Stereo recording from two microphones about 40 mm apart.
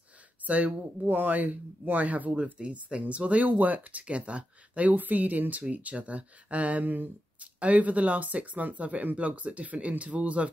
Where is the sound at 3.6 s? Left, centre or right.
Right.